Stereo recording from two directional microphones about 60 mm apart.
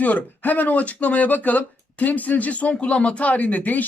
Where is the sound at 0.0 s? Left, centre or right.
Left.